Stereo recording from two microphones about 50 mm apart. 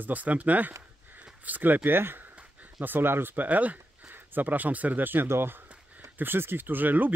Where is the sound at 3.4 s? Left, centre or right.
Right.